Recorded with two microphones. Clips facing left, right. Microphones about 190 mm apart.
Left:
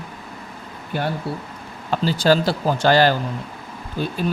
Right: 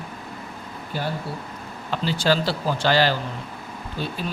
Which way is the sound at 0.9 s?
60° left (ahead or behind).